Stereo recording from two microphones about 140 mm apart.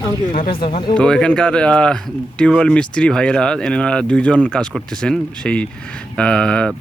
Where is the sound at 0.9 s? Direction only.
5° left (ahead or behind).